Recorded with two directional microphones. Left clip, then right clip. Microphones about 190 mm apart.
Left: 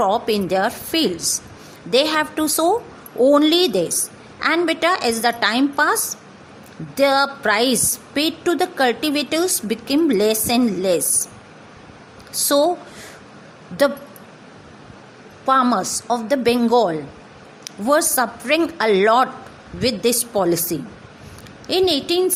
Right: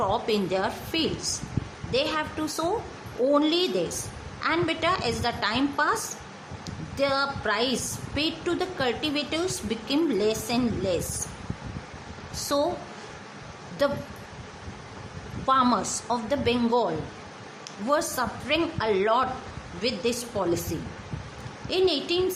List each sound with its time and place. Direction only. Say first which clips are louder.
0.0 s a woman's voice: left 7 dB; 30° left (ahead or behind)
12.3 s a woman's voice: left 9 dB; 35° left (ahead or behind)
13.8 s a woman's voice: left 8 dB; 35° left (ahead or behind)
15.4 s a woman's voice: left 6 dB; 25° left (ahead or behind)
21.7 s a woman's voice: left 6 dB; 35° left (ahead or behind)